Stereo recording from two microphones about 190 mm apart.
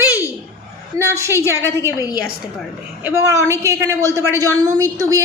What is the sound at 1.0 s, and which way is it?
Speech, 15° right (ahead or behind).